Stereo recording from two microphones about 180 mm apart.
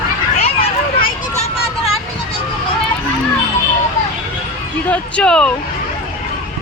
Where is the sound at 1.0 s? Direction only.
40° left (ahead or behind).